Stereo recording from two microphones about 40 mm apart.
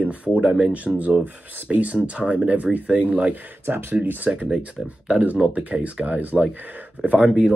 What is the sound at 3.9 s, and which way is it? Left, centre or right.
Speech, right.